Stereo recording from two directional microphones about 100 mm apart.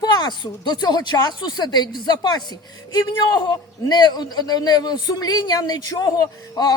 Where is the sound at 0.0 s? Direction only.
45° left (ahead or behind).